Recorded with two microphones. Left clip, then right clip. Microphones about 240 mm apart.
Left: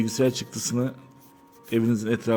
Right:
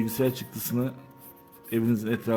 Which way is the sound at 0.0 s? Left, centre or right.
Centre.